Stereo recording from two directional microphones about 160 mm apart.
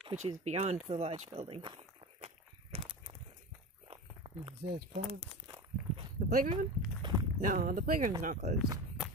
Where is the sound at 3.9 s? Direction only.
35° right (ahead or behind).